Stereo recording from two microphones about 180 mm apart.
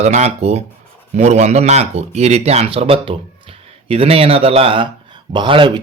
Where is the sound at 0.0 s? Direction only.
40° right (ahead or behind).